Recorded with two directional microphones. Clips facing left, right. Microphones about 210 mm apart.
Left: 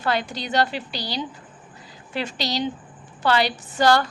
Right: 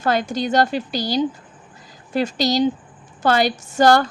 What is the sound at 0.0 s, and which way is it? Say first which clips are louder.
A woman's voice: right 5 dB; 45° right (ahead or behind).